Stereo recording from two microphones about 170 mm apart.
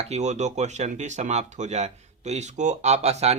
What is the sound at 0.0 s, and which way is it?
Speech, 40° right (ahead or behind).